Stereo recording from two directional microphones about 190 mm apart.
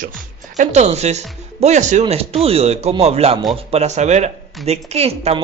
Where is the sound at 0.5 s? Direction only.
40° right (ahead or behind).